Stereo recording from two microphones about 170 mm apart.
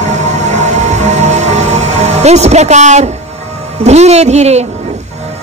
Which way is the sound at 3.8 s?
40° right (ahead or behind).